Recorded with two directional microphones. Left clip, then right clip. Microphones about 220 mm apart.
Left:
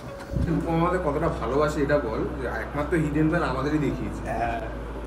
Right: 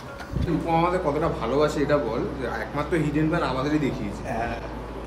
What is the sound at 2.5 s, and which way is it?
Speech, 5° right (ahead or behind).